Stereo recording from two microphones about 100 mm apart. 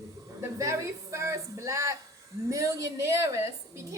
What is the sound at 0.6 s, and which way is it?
A woman's voice, 30° right (ahead or behind).